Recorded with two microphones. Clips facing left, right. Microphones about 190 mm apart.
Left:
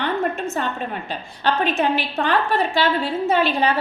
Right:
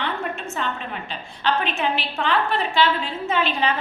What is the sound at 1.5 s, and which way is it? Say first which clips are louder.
A woman's voice: left 3 dB; 40° left (ahead or behind).